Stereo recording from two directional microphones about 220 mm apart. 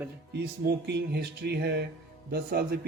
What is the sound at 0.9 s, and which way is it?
Speech, 50° right (ahead or behind).